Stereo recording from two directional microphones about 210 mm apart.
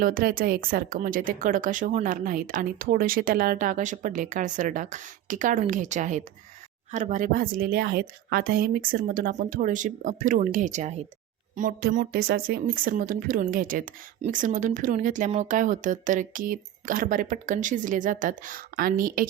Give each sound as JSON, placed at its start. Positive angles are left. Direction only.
{"t": 0.0, "sound": "speech", "side_deg": -45}